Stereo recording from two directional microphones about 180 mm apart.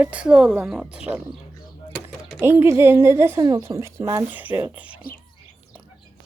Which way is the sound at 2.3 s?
15° right (ahead or behind).